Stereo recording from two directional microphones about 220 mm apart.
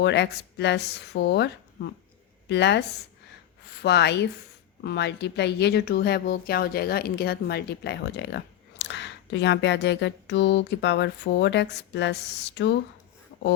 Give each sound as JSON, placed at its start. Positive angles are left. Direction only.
{"t": 0.0, "sound": "speech", "side_deg": 50}
{"t": 3.8, "sound": "speech", "side_deg": 50}